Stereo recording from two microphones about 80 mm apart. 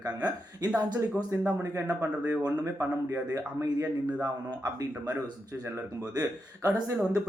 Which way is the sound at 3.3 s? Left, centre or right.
Right.